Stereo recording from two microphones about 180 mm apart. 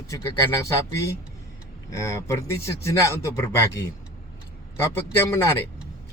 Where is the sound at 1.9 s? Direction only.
15° left (ahead or behind).